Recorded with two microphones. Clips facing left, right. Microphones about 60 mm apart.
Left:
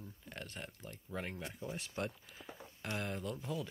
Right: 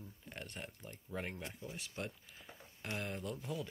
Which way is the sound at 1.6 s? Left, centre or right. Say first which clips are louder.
Left 4 dB; left.